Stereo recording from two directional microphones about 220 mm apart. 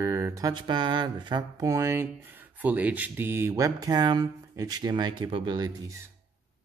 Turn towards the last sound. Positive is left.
turn(degrees=-20)  # may be behind; listen again after turning